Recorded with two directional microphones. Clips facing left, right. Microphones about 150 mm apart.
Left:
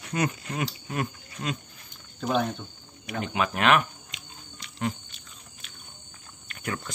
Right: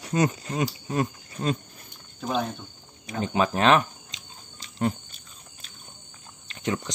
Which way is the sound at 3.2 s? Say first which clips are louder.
Right 4 dB; 30° right (ahead or behind).